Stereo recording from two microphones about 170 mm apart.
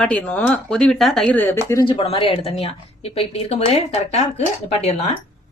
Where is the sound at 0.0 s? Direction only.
5° left (ahead or behind).